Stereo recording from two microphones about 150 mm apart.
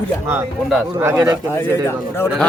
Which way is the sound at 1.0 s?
15° right (ahead or behind).